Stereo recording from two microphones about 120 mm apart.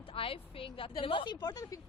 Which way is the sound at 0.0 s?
50° left (ahead or behind).